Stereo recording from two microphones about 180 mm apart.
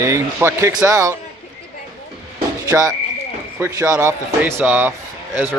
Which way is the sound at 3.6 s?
15° right (ahead or behind).